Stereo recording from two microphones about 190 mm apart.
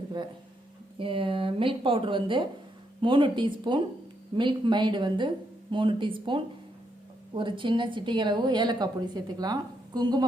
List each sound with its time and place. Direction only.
0.9 s speech: 30° right (ahead or behind)